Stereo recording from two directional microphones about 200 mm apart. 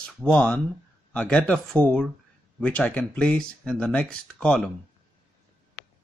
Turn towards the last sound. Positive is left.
turn(degrees=5)  # may be behind; listen again after turning